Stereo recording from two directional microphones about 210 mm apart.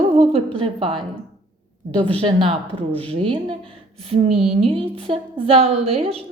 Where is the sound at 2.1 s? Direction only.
25° right (ahead or behind).